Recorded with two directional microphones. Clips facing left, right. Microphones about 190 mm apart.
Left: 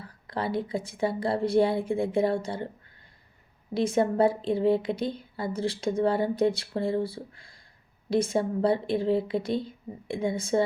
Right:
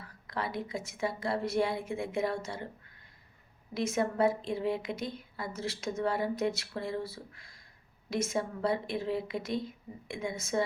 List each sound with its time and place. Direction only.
0.0 s a woman's voice: 30° left (ahead or behind)
3.8 s a woman's voice: 30° left (ahead or behind)